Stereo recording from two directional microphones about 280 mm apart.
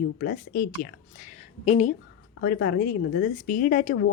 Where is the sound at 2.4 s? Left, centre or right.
Left.